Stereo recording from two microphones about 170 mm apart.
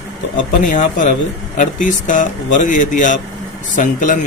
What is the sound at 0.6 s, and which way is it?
A man's voice, 50° left (ahead or behind).